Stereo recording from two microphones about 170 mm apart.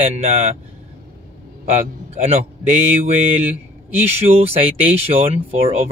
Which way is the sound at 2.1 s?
40° right (ahead or behind).